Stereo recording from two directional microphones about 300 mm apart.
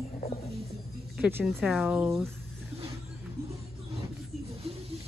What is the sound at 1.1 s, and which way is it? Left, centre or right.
Speech, centre.